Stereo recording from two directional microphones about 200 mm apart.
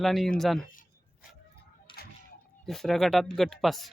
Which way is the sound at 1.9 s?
25° left (ahead or behind).